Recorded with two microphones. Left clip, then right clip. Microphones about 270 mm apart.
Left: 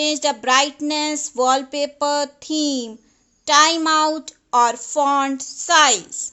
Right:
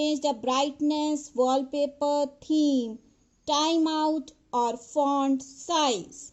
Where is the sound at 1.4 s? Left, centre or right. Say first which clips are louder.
Left 7 dB; left.